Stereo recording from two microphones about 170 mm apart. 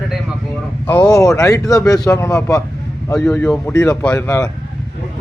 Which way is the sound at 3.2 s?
5° left (ahead or behind).